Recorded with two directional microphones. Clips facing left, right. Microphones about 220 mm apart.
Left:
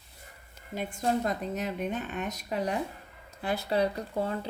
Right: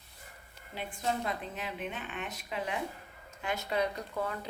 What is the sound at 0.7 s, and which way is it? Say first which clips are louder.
Speech: left 6 dB; 45° left (ahead or behind).